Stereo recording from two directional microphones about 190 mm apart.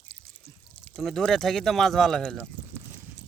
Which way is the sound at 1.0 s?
Centre (ahead or behind).